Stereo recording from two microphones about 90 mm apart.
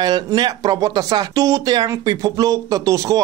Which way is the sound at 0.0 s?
55° right (ahead or behind).